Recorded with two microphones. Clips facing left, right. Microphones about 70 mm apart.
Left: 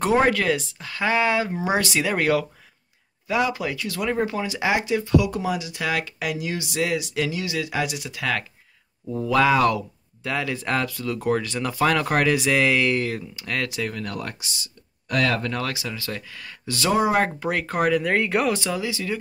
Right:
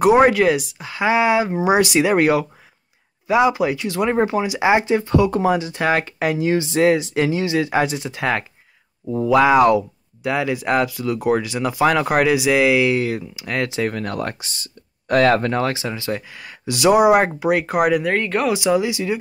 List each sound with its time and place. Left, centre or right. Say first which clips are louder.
0.0 s speech: right 7 dB; centre
13.6 s speech: right 6 dB; right
13.8 s speech: right 6 dB; right; by 18.0 s centre
18.0 s speech: right 2 dB; centre
18.5 s speech: right 7 dB; centre